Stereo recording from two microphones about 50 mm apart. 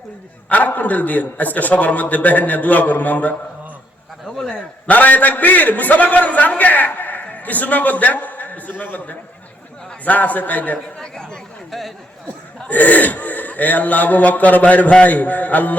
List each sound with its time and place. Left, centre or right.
0.4 s a man's voice: left
4.9 s a man's voice: left
10.9 s chatter: centre
12.5 s a man's voice: left